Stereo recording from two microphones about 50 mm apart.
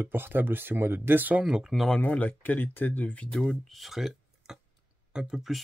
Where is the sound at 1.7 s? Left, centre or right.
Centre.